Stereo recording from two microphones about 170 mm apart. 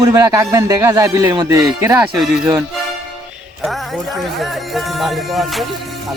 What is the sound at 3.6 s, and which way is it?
Speech, centre (ahead or behind).